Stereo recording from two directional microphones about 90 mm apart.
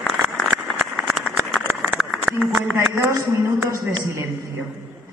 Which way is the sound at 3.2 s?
35° right (ahead or behind).